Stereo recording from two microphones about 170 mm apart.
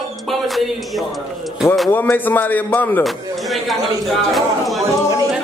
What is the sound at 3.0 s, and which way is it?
A woman's voice, centre (ahead or behind).